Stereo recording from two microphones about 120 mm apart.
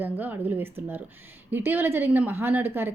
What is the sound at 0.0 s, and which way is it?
A woman's voice, 15° right (ahead or behind).